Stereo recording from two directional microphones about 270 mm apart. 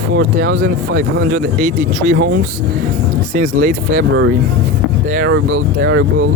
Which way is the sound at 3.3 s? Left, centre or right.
Right.